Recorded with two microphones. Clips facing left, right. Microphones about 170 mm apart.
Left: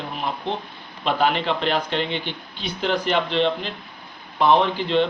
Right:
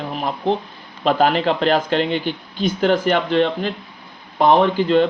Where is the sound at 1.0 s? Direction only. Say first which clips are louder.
Right 5 dB; 40° right (ahead or behind).